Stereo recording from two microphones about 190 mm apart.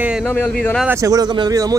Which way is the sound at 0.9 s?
15° right (ahead or behind).